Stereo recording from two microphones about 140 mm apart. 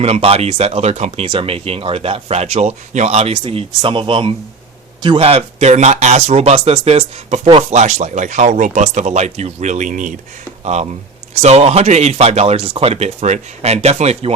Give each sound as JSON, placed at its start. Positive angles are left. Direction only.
{"t": 0.0, "sound": "speech", "side_deg": -45}
{"t": 11.3, "sound": "speech", "side_deg": -50}